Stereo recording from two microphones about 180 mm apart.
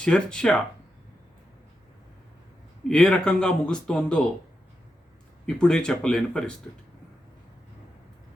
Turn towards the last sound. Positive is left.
turn(degrees=5)  # may be behind; listen again after turning